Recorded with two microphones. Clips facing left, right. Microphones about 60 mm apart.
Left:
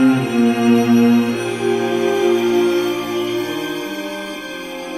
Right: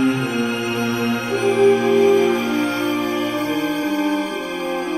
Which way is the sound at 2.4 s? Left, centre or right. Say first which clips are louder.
Left 5 dB; right.